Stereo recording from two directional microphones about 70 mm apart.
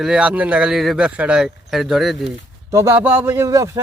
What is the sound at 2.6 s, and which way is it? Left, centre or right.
Speech, right.